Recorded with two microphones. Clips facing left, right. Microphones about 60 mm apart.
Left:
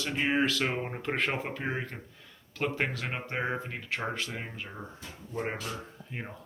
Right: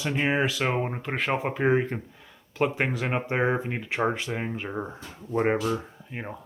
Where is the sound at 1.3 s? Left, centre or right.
Centre.